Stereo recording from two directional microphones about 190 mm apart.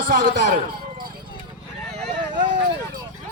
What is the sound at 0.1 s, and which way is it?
Speech, 50° right (ahead or behind).